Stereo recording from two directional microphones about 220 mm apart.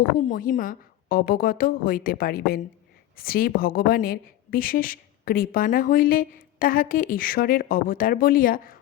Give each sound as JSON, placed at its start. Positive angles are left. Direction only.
{"t": 0.0, "sound": "a woman's voice", "side_deg": 40}